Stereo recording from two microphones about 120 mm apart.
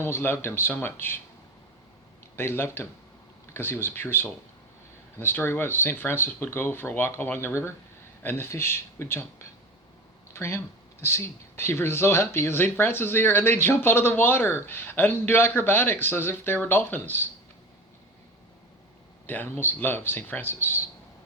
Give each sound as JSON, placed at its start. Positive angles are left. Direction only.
{"t": 0.0, "sound": "speech", "side_deg": 20}
{"t": 2.3, "sound": "speech", "side_deg": 20}
{"t": 10.3, "sound": "speech", "side_deg": 20}
{"t": 19.3, "sound": "speech", "side_deg": 15}